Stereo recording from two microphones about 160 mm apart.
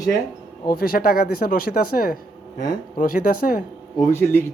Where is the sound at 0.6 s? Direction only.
65° left (ahead or behind).